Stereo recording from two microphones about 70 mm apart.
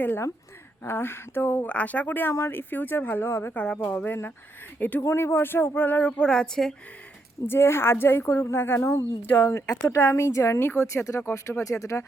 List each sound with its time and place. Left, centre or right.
0.9 s speech: left
1.6 s speech: left
6.2 s speech: centre
7.4 s speech: left